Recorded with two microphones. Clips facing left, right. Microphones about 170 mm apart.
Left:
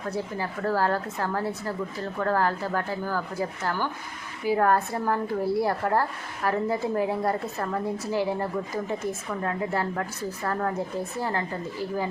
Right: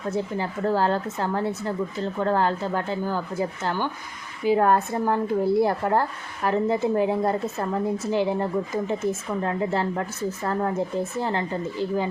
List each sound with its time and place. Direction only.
0.1 s speech: 25° right (ahead or behind)